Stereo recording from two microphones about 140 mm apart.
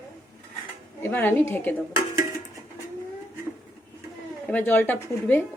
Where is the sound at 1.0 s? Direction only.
15° left (ahead or behind).